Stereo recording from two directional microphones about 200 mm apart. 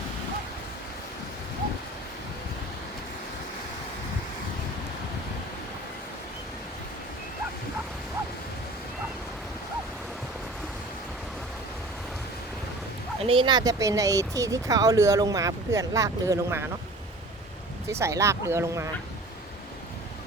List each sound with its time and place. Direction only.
13.2 s speech: 25° right (ahead or behind)
18.0 s speech: 15° right (ahead or behind)